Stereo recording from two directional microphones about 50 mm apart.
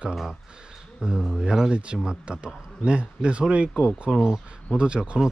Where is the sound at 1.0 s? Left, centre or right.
Centre.